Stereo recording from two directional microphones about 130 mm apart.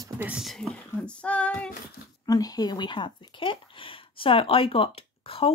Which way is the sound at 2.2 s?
30° left (ahead or behind).